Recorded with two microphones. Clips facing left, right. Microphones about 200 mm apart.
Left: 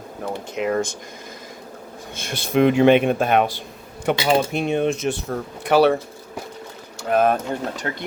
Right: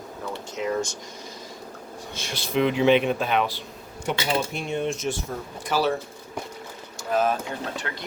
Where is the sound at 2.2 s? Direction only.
50° left (ahead or behind).